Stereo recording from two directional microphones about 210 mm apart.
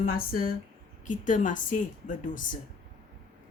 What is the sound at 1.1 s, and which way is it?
A woman's voice, 40° left (ahead or behind).